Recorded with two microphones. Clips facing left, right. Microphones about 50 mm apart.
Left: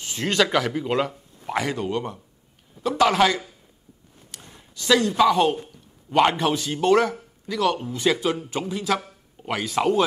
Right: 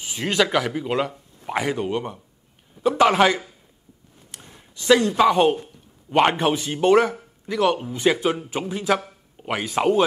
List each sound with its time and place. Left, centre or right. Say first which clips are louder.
0.0 s speech: even; centre
1.4 s a man's voice: right 1 dB; centre
4.3 s a sound: even; right
6.1 s speech: right 1 dB; right